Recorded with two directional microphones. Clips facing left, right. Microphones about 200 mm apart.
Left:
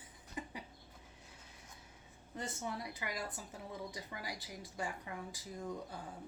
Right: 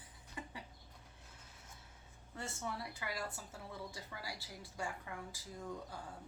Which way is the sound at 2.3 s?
15° left (ahead or behind).